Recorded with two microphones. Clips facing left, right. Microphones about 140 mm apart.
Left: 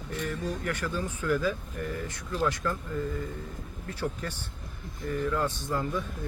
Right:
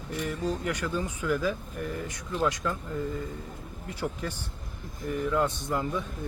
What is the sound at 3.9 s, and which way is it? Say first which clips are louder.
Speech: even; 10° right (ahead or behind).